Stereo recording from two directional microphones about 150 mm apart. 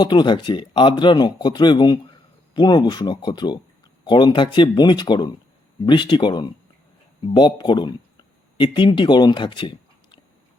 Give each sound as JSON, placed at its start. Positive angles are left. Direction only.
{"t": 0.0, "sound": "speech", "side_deg": 30}